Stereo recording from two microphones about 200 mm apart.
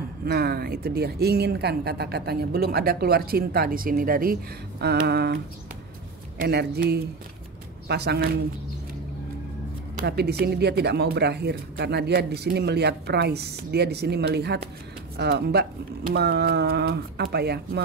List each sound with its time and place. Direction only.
0.2 s speech: 50° right (ahead or behind)
10.0 s speech: 55° right (ahead or behind)